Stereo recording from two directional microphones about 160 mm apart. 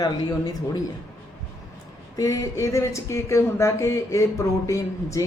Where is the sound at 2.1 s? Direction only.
20° left (ahead or behind).